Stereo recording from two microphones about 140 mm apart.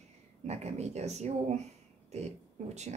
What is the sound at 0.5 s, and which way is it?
A woman's voice, 50° right (ahead or behind).